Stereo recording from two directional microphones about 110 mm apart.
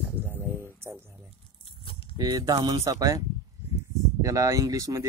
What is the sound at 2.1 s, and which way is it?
Speech, 35° right (ahead or behind).